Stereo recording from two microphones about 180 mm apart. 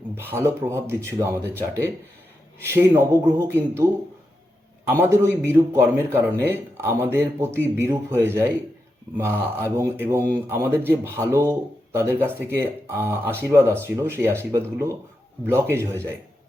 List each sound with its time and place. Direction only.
0.2 s speech: 15° right (ahead or behind)
4.9 s speech: 15° right (ahead or behind)